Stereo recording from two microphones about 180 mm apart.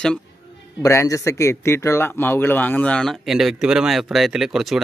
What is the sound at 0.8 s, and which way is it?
Speech, 15° left (ahead or behind).